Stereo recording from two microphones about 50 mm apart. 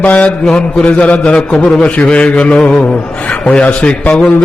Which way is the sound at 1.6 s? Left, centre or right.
Centre.